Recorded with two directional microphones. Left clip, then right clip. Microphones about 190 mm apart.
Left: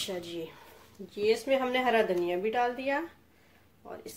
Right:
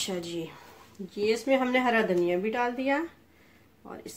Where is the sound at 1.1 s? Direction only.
55° right (ahead or behind).